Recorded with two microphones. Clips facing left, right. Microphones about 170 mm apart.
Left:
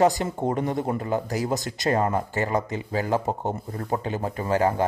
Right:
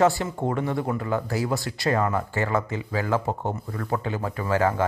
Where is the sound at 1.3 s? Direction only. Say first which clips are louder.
Even; 20° left (ahead or behind).